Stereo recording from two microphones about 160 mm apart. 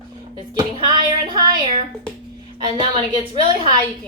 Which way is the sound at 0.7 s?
30° right (ahead or behind).